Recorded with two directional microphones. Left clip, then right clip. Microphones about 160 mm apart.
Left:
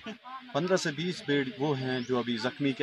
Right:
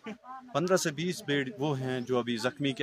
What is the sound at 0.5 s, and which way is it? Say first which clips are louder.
Speech: right 1 dB; 20° right (ahead or behind).